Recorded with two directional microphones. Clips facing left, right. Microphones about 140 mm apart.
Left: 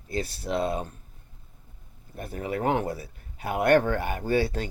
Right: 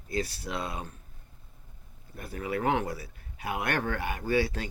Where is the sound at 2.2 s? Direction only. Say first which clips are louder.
Left 2 dB; 35° left (ahead or behind).